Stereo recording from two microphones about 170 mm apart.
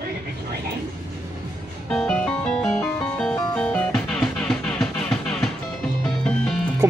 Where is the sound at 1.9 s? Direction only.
5° left (ahead or behind).